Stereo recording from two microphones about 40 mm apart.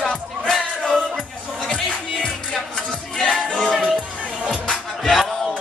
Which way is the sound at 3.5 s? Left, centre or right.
Left.